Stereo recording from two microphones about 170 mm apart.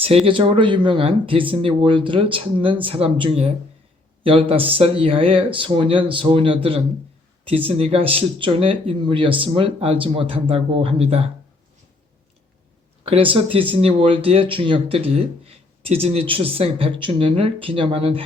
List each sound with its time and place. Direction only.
0.0 s speech: 35° right (ahead or behind)
13.1 s speech: 30° right (ahead or behind)